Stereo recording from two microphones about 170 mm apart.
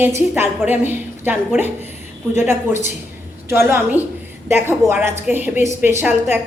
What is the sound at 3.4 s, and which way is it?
A woman's voice, 15° right (ahead or behind).